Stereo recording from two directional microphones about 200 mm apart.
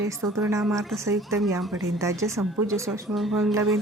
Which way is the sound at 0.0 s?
15° right (ahead or behind).